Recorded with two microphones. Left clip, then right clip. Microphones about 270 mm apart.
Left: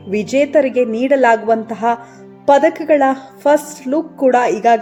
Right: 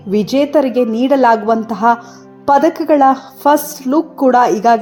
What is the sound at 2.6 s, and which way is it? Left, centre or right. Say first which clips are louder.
Speech: right 1 dB; centre.